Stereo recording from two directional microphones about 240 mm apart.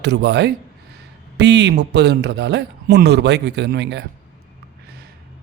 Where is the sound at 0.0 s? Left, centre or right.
Right.